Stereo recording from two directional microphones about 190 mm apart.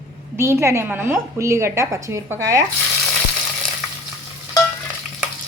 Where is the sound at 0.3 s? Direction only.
15° right (ahead or behind).